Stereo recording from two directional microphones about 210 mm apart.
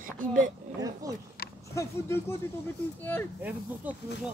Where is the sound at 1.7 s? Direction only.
15° left (ahead or behind).